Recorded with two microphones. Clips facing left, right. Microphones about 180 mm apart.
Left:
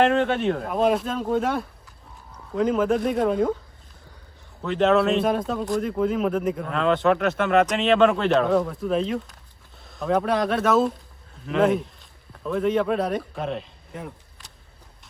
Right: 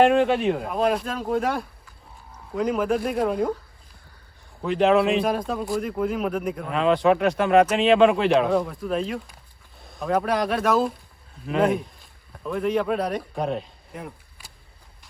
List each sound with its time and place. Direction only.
0.0 s speech: 10° right (ahead or behind)
4.6 s speech: 10° right (ahead or behind)
5.1 s speech: centre (ahead or behind)
7.3 s speech: 35° right (ahead or behind)
8.1 s speech: 10° right (ahead or behind)
8.4 s speech: centre (ahead or behind)
13.3 s speech: 45° right (ahead or behind)
13.6 s insect: centre (ahead or behind)